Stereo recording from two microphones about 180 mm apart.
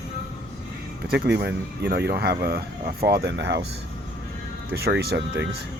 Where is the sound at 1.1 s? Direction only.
65° right (ahead or behind).